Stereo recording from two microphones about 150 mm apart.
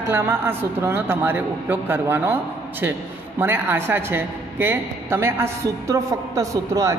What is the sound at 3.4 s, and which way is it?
A woman's voice, 15° right (ahead or behind).